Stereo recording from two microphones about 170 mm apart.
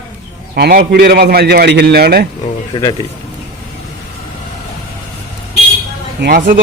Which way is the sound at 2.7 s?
25° left (ahead or behind).